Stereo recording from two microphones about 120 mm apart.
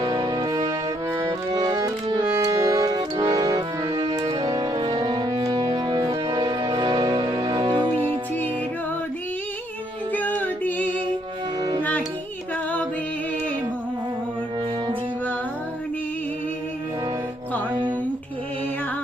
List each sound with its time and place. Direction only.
0.0 s music: 35° right (ahead or behind)
10.1 s music: 15° left (ahead or behind)